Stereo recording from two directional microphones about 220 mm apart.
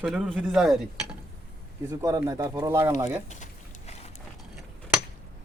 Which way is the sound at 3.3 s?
35° left (ahead or behind).